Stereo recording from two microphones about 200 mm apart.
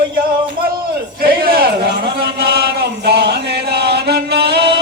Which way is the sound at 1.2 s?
50° right (ahead or behind).